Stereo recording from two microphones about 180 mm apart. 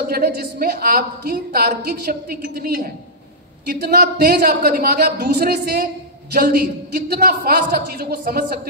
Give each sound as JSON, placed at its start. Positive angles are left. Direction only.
{"t": 0.0, "sound": "a woman's voice", "side_deg": -55}